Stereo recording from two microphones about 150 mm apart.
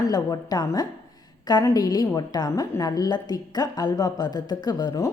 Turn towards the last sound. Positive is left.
turn(degrees=25)  # may be behind; listen again after turning